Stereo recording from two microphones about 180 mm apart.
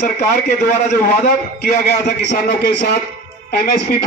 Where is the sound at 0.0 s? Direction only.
45° left (ahead or behind).